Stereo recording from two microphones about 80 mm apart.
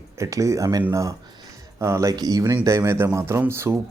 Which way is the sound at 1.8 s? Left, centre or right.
Right.